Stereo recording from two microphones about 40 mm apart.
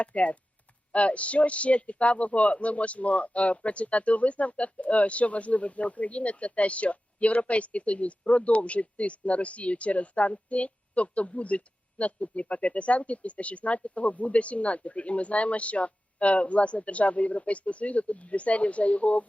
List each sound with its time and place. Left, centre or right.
0.0 s speech: left